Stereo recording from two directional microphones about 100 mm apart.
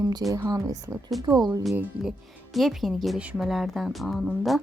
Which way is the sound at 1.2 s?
45° right (ahead or behind).